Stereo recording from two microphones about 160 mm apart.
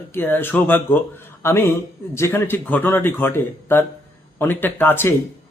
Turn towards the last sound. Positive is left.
turn(degrees=15)  # may be behind; listen again after turning